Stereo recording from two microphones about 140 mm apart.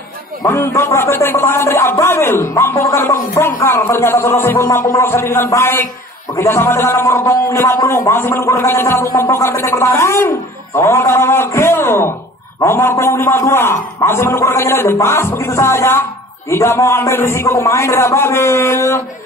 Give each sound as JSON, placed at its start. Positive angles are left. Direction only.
{"t": 0.5, "sound": "speech", "side_deg": 20}